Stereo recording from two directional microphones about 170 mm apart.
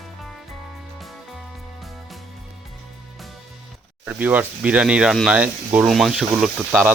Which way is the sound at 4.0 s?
10° right (ahead or behind).